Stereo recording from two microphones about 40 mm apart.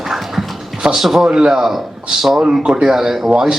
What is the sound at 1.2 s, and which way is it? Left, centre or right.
Speech, centre.